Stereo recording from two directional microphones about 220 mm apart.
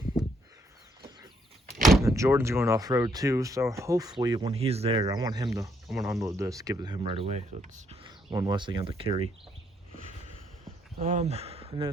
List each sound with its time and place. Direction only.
1.7 s door: centre (ahead or behind)
2.0 s speech: 15° right (ahead or behind)
5.9 s speech: centre (ahead or behind)
6.2 s speech: 15° right (ahead or behind)
11.0 s speech: 30° right (ahead or behind)